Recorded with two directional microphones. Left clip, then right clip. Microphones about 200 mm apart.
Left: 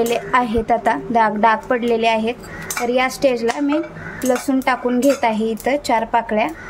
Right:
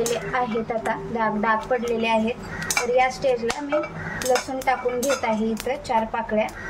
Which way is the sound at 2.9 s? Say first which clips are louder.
Left 4 dB; 55° left (ahead or behind).